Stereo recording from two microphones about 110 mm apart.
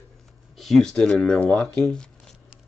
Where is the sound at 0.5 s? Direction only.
5° left (ahead or behind).